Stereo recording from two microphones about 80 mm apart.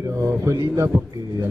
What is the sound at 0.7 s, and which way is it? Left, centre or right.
Speech, right.